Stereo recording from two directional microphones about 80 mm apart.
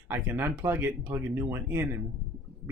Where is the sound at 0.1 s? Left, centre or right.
Right.